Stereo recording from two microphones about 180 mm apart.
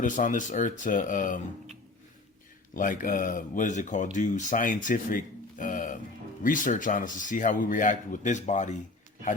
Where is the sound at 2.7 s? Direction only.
50° left (ahead or behind).